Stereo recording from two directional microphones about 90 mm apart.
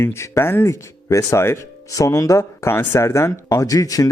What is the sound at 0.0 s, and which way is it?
Speech, 30° left (ahead or behind).